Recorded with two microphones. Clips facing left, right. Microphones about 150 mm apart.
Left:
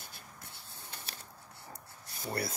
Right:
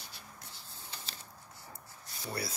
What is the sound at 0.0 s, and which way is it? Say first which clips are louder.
Writing: even; 55° left (ahead or behind).